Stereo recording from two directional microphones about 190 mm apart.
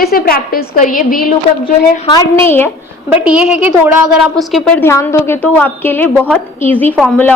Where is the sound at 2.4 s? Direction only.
10° left (ahead or behind).